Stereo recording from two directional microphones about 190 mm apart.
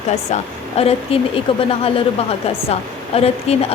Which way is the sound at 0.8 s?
30° left (ahead or behind).